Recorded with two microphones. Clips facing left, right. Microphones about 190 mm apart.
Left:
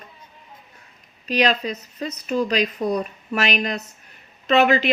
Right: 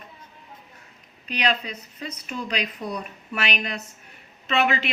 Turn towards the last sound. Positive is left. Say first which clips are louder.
# left 6 dB
turn(degrees=40)  # may be behind; listen again after turning